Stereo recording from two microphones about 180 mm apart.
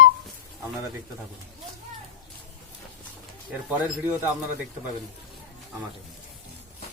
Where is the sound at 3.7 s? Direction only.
10° right (ahead or behind).